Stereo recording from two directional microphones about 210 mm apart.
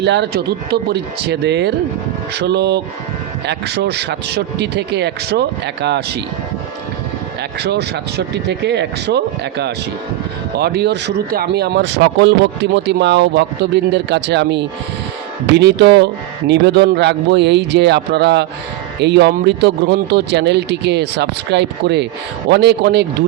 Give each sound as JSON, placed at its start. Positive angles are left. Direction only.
{"t": 0.0, "sound": "speech", "side_deg": -55}
{"t": 7.6, "sound": "speech", "side_deg": -50}